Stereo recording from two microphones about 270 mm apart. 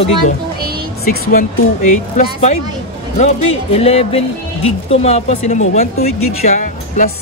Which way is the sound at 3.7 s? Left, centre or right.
Left.